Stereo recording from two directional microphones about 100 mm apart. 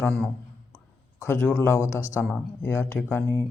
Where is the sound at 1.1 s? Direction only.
25° left (ahead or behind).